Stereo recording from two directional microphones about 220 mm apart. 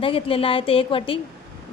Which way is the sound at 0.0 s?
25° left (ahead or behind).